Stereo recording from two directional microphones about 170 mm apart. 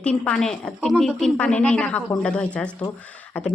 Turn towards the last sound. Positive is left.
turn(degrees=10)  # may be behind; listen again after turning